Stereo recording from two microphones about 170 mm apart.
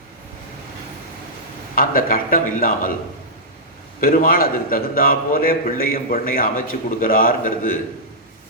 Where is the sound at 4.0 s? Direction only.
60° left (ahead or behind).